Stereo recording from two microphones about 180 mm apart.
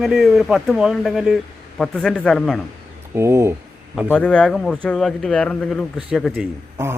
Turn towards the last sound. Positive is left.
turn(degrees=-15)  # may be behind; listen again after turning